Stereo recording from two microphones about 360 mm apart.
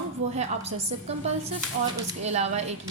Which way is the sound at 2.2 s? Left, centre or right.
Centre.